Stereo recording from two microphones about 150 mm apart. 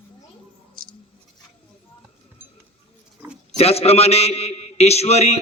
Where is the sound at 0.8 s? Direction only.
75° right (ahead or behind).